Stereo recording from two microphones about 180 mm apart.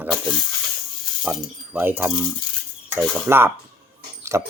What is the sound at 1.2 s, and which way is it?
Mechanisms, 5° right (ahead or behind).